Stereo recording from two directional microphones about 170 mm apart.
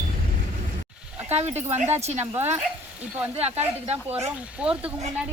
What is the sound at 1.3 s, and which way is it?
Speech, 40° right (ahead or behind).